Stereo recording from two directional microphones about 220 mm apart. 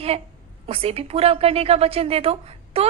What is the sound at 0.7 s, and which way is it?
A woman's voice, 25° right (ahead or behind).